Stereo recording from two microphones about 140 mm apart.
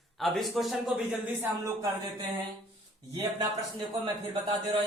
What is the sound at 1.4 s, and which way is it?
Speech, 20° right (ahead or behind).